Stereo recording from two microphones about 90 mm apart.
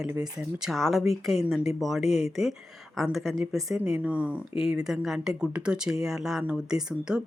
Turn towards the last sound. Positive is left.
turn(degrees=-10)  # may be behind; listen again after turning